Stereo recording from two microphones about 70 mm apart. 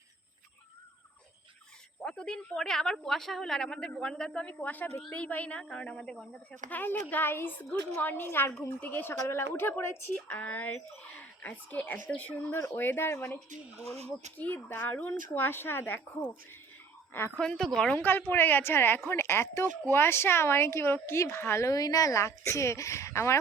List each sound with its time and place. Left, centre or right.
2.0 s a woman's voice: centre
12.5 s a woman's voice: left
14.3 s a woman's voice: left
17.4 s a woman's voice: centre
17.9 s a woman's voice: left
21.7 s speech: left